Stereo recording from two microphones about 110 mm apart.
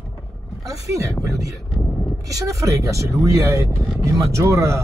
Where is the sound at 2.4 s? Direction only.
30° right (ahead or behind).